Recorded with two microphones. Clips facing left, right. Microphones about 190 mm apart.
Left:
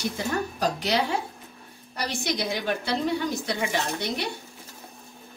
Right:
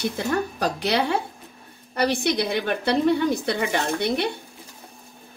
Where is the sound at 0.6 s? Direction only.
60° right (ahead or behind).